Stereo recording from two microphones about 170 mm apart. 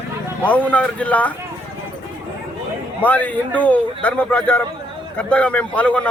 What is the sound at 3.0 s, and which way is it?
A man's voice, 10° left (ahead or behind).